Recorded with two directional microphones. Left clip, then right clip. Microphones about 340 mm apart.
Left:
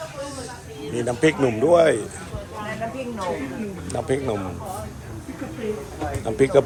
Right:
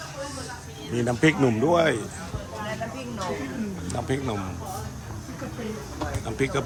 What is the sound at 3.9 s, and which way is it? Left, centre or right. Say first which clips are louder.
Speech: left 5 dB; centre.